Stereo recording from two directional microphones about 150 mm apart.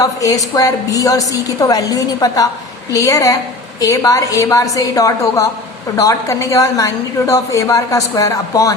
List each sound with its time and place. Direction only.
0.0 s a woman's voice: 25° left (ahead or behind)